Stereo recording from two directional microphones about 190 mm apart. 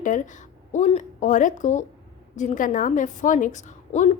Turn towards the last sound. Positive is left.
turn(degrees=40)  # may be behind; listen again after turning